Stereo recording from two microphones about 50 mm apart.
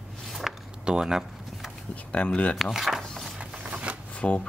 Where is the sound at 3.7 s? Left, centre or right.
Right.